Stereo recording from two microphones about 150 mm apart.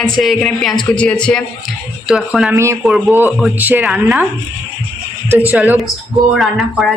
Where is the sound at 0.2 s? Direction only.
Centre (ahead or behind).